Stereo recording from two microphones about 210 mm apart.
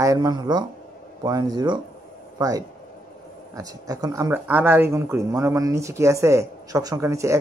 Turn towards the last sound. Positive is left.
turn(degrees=-15)  # may be behind; listen again after turning